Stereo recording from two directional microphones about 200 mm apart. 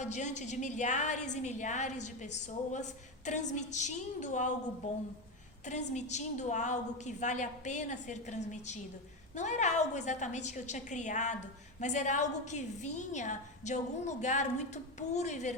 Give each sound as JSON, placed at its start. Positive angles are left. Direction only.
{"t": 0.0, "sound": "a woman's voice", "side_deg": 35}
{"t": 5.9, "sound": "a woman's voice", "side_deg": 35}